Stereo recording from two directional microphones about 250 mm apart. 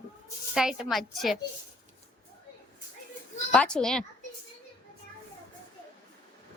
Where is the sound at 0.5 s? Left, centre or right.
Centre.